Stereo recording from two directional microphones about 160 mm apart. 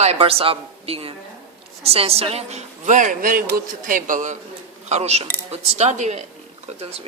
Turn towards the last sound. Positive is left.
turn(degrees=-40)  # may be behind; listen again after turning